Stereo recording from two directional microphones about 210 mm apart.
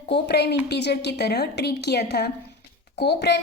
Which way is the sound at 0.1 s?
50° left (ahead or behind).